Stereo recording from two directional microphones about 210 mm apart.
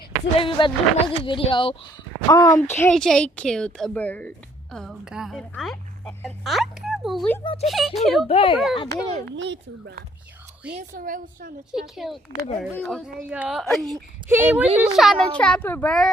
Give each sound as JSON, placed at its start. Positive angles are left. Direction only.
{"t": 0.3, "sound": "a woman's voice", "side_deg": 25}
{"t": 8.3, "sound": "speech", "side_deg": 25}
{"t": 9.2, "sound": "speech", "side_deg": -60}
{"t": 10.9, "sound": "a woman's voice", "side_deg": -40}
{"t": 11.7, "sound": "a woman's voice", "side_deg": 0}
{"t": 13.1, "sound": "a woman's voice", "side_deg": -5}
{"t": 14.3, "sound": "a woman's voice", "side_deg": -10}